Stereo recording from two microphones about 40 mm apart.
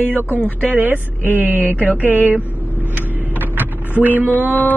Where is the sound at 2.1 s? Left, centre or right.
Right.